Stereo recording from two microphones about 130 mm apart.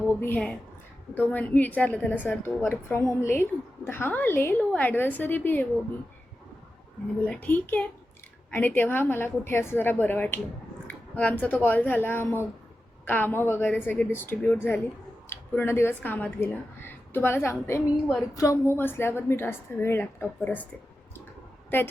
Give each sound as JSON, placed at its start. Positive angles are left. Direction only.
{"t": 0.2, "sound": "a woman's voice", "side_deg": 10}
{"t": 7.4, "sound": "a woman's voice", "side_deg": 10}
{"t": 21.7, "sound": "a woman's voice", "side_deg": 15}